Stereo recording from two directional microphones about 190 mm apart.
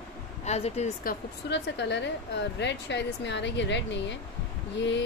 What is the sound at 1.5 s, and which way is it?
Speech, 65° left (ahead or behind).